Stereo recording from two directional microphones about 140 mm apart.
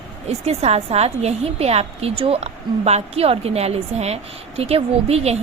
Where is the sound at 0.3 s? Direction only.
50° right (ahead or behind).